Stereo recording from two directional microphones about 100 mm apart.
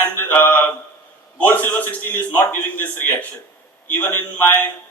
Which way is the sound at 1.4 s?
15° left (ahead or behind).